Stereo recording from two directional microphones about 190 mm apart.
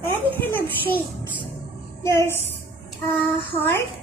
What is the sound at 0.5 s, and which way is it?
Music, 10° left (ahead or behind).